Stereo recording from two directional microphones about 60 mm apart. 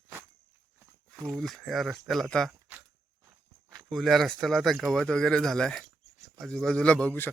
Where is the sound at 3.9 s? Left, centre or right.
Centre.